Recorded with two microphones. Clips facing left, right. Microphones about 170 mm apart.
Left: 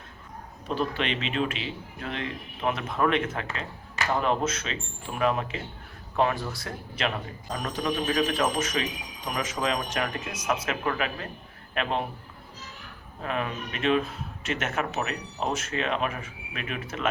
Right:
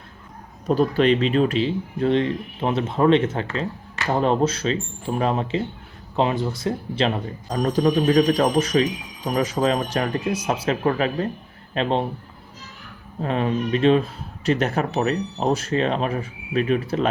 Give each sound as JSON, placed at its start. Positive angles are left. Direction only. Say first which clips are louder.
{"t": 0.7, "sound": "speech", "louder": "right 11 dB", "side_deg": -40}
{"t": 13.2, "sound": "speech", "louder": "right 8 dB", "side_deg": -30}